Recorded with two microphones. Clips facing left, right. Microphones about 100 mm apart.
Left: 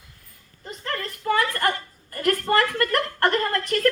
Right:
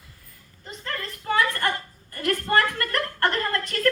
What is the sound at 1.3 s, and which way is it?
A woman's voice, 45° left (ahead or behind).